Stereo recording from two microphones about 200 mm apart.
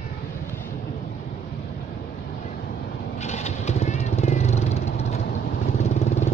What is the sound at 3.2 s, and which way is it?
Vehicle, 35° left (ahead or behind).